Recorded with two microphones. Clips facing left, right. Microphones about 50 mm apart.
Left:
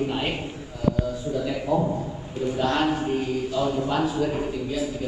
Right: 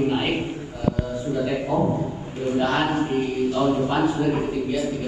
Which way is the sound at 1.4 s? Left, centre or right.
Right.